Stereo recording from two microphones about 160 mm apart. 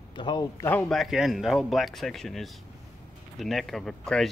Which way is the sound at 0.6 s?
10° left (ahead or behind).